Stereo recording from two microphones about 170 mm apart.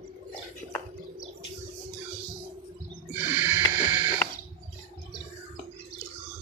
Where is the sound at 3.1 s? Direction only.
10° right (ahead or behind).